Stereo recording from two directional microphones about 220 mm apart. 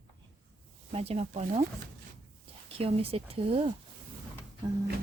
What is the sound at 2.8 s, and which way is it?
Speech, 25° right (ahead or behind).